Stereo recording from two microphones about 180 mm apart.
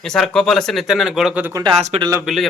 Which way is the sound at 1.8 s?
35° right (ahead or behind).